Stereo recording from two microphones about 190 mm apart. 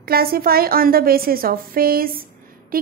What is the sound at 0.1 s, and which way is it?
A woman's voice, 50° right (ahead or behind).